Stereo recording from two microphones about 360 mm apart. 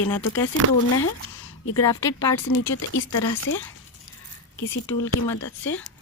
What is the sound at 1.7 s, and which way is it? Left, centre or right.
Speech, centre.